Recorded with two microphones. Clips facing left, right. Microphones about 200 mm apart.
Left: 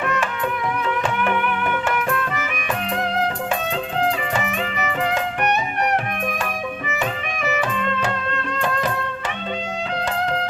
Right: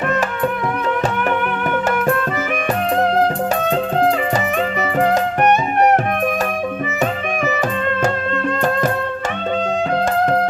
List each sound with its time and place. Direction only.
0.1 s music: 40° right (ahead or behind)
2.0 s music: 45° right (ahead or behind)
4.8 s music: 40° right (ahead or behind)
7.9 s music: 50° right (ahead or behind)